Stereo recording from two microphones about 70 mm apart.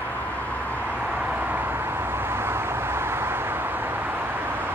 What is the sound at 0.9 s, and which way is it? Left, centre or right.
Vehicle, right.